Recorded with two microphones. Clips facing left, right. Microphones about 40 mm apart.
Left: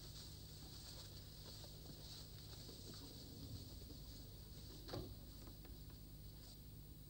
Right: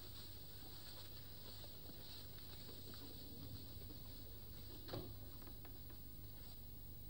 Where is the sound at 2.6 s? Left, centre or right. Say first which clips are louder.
Right 1 dB; centre.